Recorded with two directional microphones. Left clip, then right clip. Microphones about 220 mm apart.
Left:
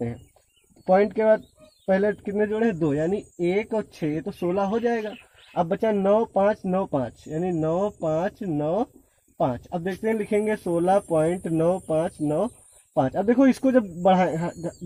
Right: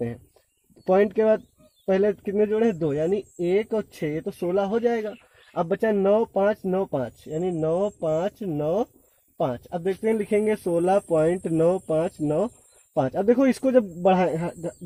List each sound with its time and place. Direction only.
0.9 s speech: 35° right (ahead or behind)